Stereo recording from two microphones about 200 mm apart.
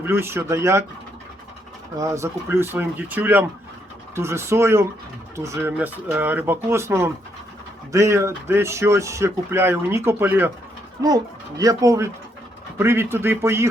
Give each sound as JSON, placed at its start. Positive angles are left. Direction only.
{"t": 0.0, "sound": "speech", "side_deg": -10}
{"t": 2.0, "sound": "speech", "side_deg": -15}